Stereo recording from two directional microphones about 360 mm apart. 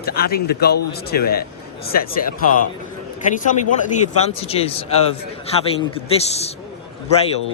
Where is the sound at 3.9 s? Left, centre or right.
Centre.